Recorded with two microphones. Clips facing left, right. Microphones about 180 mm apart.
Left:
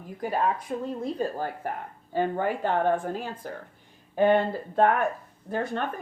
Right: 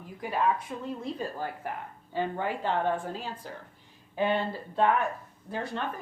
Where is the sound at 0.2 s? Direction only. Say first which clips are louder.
Left 1 dB; 40° left (ahead or behind).